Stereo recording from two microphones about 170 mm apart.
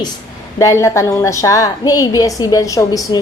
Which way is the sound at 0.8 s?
15° left (ahead or behind).